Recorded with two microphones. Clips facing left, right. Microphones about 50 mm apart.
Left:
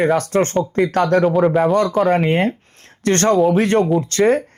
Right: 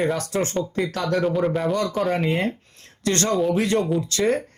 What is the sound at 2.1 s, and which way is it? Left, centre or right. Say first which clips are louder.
Speech: left 6 dB; left.